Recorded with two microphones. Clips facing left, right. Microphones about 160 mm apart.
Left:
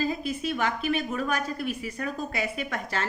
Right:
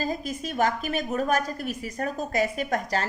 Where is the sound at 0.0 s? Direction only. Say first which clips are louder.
Left 1 dB; 40° right (ahead or behind).